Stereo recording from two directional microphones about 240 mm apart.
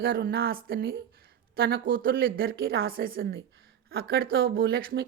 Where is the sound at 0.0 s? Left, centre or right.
Right.